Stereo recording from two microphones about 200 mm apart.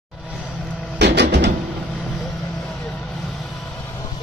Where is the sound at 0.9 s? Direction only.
55° right (ahead or behind).